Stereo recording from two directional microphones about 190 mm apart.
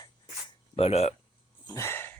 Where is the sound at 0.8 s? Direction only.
30° left (ahead or behind).